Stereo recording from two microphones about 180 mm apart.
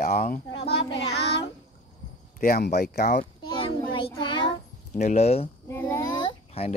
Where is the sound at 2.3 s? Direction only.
55° left (ahead or behind).